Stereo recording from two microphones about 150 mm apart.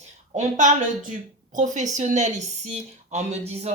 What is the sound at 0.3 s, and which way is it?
A woman's voice, 55° right (ahead or behind).